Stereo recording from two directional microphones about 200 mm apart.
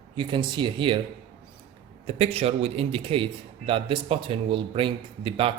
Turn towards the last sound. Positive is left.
turn(degrees=-25)  # may be behind; listen again after turning